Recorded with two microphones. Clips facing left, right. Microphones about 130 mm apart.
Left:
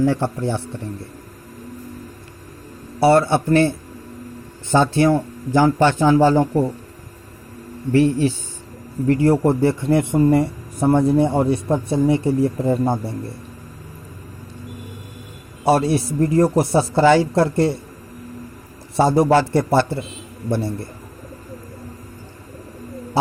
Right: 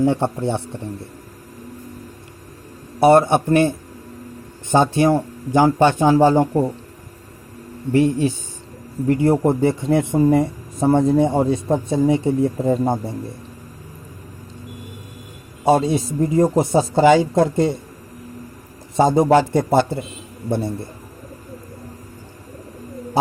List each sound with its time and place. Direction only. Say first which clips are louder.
0.0 s speech: right 1 dB; 25° right (ahead or behind)
3.0 s speech: right 2 dB; 20° right (ahead or behind)
7.9 s a man's voice: left 1 dB; 20° right (ahead or behind)
15.6 s speech: even; 20° right (ahead or behind)
18.9 s speech: right 1 dB; 20° right (ahead or behind)